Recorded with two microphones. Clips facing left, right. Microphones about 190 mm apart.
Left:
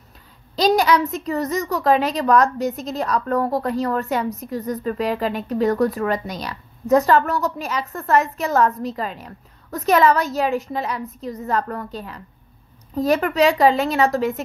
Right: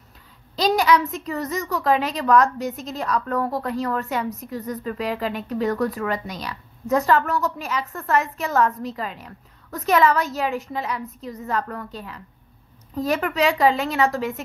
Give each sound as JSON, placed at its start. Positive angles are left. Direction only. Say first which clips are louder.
{"t": 0.7, "sound": "a woman's voice", "louder": "left 1 dB", "side_deg": 35}